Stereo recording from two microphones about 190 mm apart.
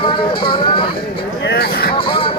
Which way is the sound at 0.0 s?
25° left (ahead or behind).